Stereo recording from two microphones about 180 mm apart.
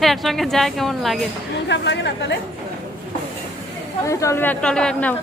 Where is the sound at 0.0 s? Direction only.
Centre (ahead or behind).